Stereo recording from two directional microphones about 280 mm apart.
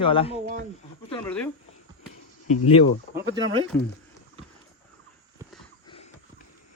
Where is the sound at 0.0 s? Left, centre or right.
Centre.